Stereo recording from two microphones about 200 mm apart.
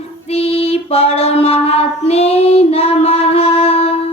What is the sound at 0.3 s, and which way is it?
Child singing, 30° left (ahead or behind).